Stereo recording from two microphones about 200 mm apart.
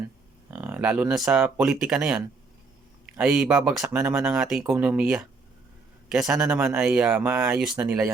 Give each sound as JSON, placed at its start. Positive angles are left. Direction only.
{"t": 0.5, "sound": "speech", "side_deg": -10}